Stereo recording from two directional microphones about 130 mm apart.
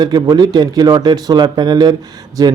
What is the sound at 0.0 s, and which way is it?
Speech, 30° right (ahead or behind).